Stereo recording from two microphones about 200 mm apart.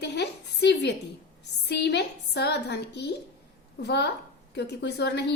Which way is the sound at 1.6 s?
55° left (ahead or behind).